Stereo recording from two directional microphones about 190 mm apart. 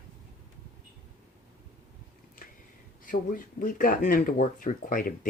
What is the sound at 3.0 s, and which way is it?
Speech, 45° left (ahead or behind).